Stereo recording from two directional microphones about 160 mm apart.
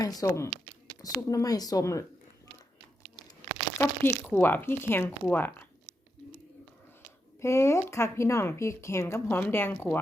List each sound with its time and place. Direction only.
0.0 s speech: 20° left (ahead or behind)
3.8 s speech: 15° left (ahead or behind)
7.4 s speech: 15° left (ahead or behind)